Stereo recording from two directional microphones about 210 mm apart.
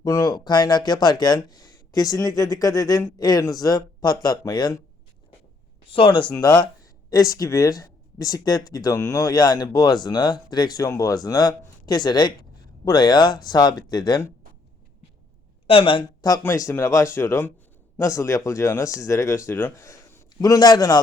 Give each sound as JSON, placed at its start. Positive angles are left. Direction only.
{"t": 0.0, "sound": "speech", "side_deg": 20}
{"t": 5.9, "sound": "speech", "side_deg": 25}
{"t": 15.6, "sound": "speech", "side_deg": 25}